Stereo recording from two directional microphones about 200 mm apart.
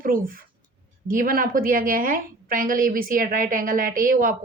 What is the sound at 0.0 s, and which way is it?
A woman's voice, 45° right (ahead or behind).